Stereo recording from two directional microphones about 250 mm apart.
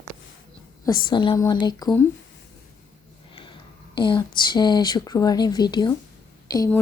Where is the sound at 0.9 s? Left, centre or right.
Centre.